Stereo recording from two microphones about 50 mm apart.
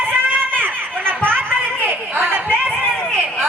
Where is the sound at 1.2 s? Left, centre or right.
Right.